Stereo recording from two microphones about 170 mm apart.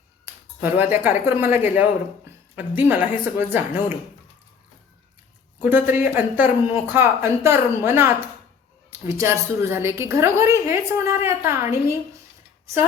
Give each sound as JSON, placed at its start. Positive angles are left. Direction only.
{"t": 0.6, "sound": "a woman's voice", "side_deg": -10}
{"t": 5.6, "sound": "a woman's voice", "side_deg": -10}